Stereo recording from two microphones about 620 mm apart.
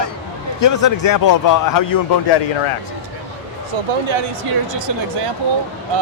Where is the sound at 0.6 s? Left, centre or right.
Left.